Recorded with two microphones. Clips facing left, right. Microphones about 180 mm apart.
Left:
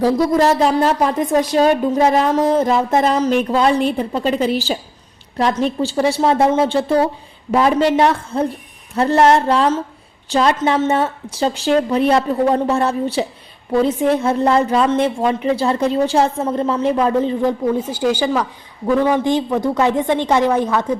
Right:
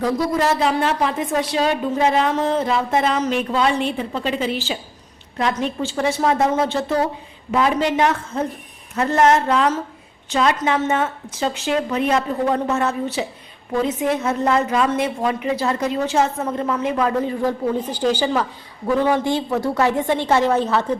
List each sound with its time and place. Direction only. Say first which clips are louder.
0.0 s a woman's voice: left 5 dB; 40° left (ahead or behind)
17.7 s a woman's voice: left 2 dB; 10° left (ahead or behind)